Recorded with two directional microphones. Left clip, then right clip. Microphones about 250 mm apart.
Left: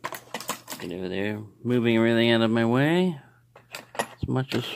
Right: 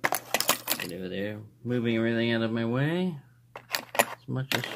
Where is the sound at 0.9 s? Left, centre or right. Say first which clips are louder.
Left 4 dB; left.